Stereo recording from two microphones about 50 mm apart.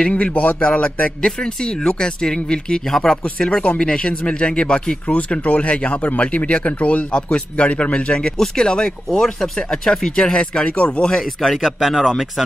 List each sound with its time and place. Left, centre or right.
0.0 s a man's voice: left
0.6 s speech: left
1.2 s speech: centre
11.4 s speech: centre